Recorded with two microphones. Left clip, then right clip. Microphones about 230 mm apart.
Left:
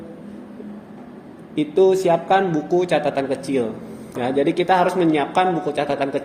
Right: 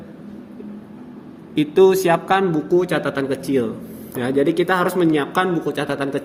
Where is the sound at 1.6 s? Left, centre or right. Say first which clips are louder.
Right 2 dB; right.